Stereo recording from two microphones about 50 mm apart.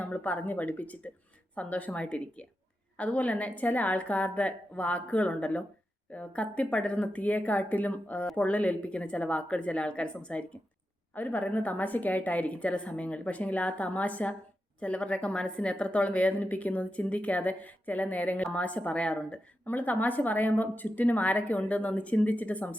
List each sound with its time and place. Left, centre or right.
0.0 s a woman's voice: left
11.1 s a woman's voice: left
19.6 s a woman's voice: left